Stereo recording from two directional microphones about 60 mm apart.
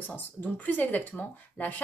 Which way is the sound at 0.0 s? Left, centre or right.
Left.